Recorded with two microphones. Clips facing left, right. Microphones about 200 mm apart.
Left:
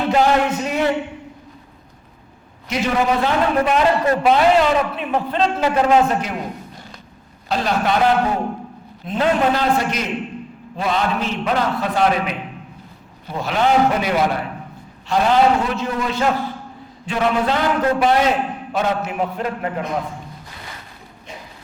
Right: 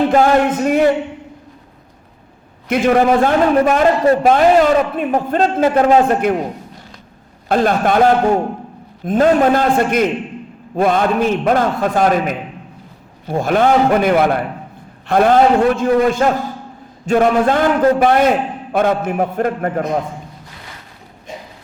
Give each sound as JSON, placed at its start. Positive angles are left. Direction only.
{"t": 0.1, "sound": "a man's voice", "side_deg": -50}
{"t": 2.6, "sound": "a man's voice", "side_deg": -55}
{"t": 7.4, "sound": "a man's voice", "side_deg": -55}